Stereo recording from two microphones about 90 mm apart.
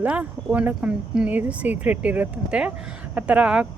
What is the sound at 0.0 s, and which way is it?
Speech, 15° right (ahead or behind).